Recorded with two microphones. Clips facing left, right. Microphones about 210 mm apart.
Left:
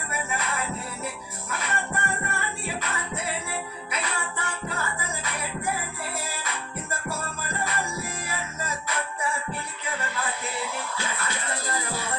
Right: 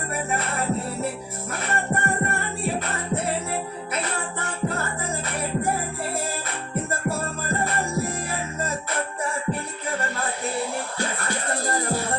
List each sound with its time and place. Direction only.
0.1 s music: 45° right (ahead or behind)